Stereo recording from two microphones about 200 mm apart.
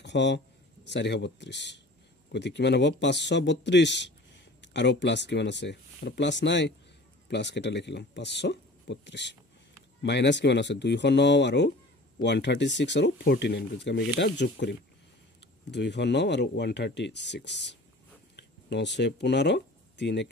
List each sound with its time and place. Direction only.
0.0 s a man's voice: 60° left (ahead or behind)